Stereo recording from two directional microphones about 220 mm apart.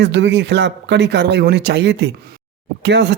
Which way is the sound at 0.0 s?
50° right (ahead or behind).